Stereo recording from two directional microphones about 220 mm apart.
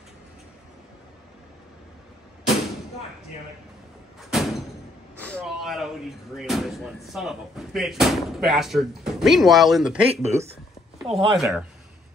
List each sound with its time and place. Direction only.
4.3 s a sound: centre (ahead or behind)
5.2 s speech: 5° left (ahead or behind)
10.2 s speech: 30° right (ahead or behind)
11.1 s speech: centre (ahead or behind)